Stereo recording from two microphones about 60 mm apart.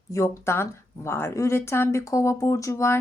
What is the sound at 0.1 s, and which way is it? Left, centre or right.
Speech, left.